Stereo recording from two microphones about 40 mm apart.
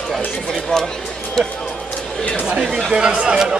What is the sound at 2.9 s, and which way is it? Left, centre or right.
Speech, right.